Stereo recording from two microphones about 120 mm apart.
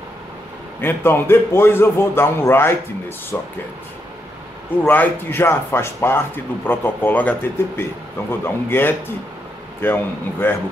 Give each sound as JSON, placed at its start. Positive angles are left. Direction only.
{"t": 0.7, "sound": "a man's voice", "side_deg": 20}
{"t": 4.8, "sound": "speech", "side_deg": 15}